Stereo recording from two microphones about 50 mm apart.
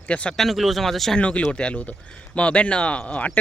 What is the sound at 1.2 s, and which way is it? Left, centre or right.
Speech, left.